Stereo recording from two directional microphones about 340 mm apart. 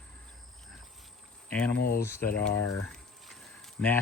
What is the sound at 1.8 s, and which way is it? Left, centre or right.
Speech, left.